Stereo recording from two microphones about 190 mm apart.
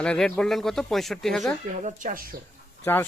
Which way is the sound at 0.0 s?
5° left (ahead or behind).